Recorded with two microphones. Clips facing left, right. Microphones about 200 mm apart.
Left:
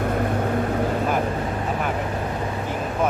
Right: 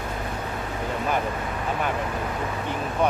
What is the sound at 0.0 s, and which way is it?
Vehicle, 55° left (ahead or behind).